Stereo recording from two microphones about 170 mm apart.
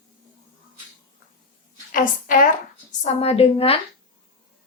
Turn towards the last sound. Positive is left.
turn(degrees=35)  # may be behind; listen again after turning